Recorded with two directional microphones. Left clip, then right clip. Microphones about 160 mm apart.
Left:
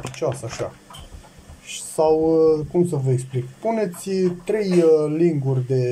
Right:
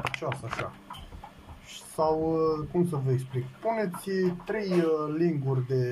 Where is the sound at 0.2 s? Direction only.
15° left (ahead or behind).